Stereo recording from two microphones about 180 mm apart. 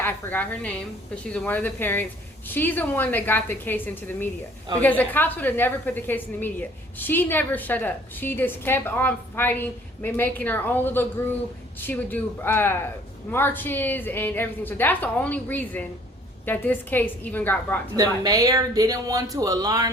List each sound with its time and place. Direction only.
0.0 s a woman's voice: 10° left (ahead or behind)
17.9 s speech: 20° right (ahead or behind)